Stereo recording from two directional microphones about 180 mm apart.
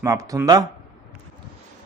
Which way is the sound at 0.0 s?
20° right (ahead or behind).